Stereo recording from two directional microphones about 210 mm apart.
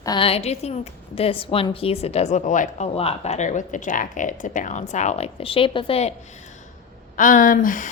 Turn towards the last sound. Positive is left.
turn(degrees=35)  # may be behind; listen again after turning